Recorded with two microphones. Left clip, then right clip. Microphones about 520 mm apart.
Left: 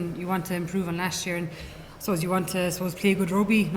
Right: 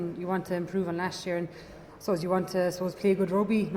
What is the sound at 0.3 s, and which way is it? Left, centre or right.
Speech, left.